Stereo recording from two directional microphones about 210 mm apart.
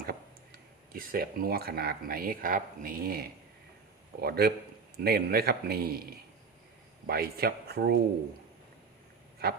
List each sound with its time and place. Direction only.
0.0 s a man's voice: 45° right (ahead or behind)
7.1 s a man's voice: 45° right (ahead or behind)
9.4 s a sound: 45° right (ahead or behind)